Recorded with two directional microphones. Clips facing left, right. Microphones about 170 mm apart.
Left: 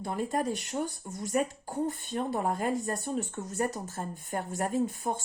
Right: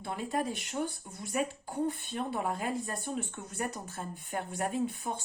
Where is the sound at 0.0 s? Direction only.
40° left (ahead or behind).